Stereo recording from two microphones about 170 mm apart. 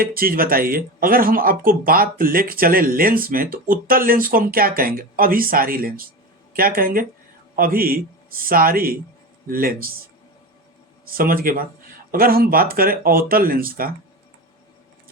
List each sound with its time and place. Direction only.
0.0 s speech: 60° right (ahead or behind)
11.0 s speech: 55° right (ahead or behind)